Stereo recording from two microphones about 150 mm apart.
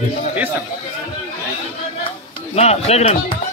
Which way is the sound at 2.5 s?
45° left (ahead or behind).